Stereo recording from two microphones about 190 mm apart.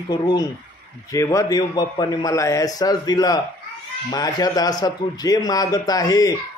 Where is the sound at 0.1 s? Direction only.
20° left (ahead or behind).